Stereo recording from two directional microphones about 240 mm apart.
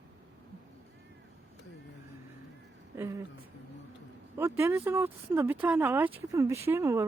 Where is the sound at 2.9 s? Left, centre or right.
Centre.